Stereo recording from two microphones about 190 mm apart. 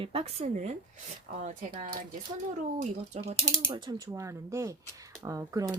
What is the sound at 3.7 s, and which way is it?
Speech, 20° right (ahead or behind).